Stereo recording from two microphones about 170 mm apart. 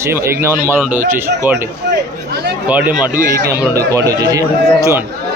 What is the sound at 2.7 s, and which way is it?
A man's voice, 10° right (ahead or behind).